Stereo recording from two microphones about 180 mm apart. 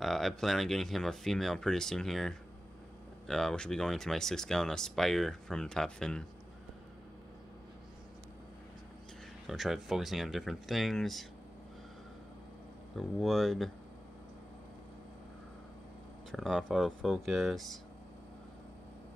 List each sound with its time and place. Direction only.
0.0 s speech: centre (ahead or behind)
9.5 s speech: centre (ahead or behind)
12.9 s speech: centre (ahead or behind)
16.3 s speech: centre (ahead or behind)